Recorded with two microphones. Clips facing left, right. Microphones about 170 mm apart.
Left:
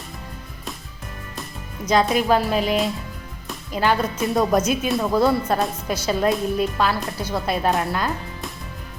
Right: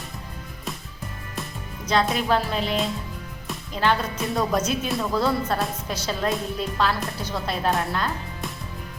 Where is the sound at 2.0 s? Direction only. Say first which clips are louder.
Left 4 dB; 5° left (ahead or behind).